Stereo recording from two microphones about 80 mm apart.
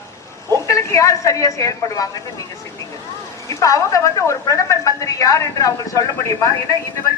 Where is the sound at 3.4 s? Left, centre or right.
Left.